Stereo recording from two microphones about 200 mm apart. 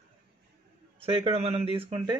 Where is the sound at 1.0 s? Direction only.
30° right (ahead or behind).